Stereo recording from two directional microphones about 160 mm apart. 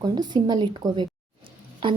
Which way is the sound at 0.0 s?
25° right (ahead or behind).